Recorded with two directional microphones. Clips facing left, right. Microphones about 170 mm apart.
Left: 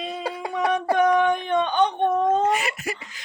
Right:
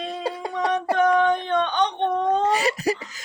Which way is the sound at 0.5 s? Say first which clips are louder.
Left 1 dB; 10° left (ahead or behind).